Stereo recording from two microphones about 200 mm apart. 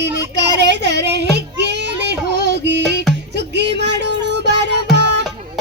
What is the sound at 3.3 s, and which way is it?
Music, 60° right (ahead or behind).